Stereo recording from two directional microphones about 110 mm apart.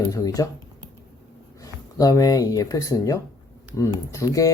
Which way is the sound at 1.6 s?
35° left (ahead or behind).